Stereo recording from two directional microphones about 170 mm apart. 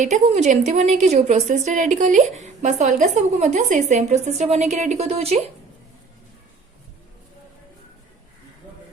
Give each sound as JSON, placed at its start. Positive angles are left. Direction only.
{"t": 0.0, "sound": "a woman's voice", "side_deg": -45}